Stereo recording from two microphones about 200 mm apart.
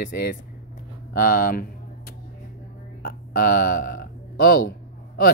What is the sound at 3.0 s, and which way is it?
Speech, 45° left (ahead or behind).